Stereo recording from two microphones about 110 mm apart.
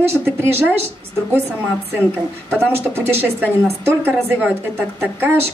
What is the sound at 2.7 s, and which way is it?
Speech, 20° right (ahead or behind).